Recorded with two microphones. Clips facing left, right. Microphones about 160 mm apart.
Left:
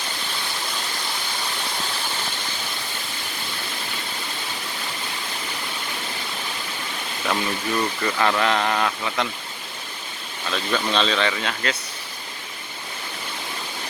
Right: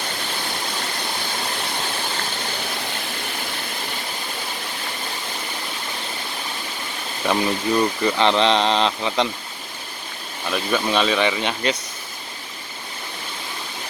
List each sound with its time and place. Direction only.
7.3 s speech: 20° right (ahead or behind)
10.5 s speech: 10° right (ahead or behind)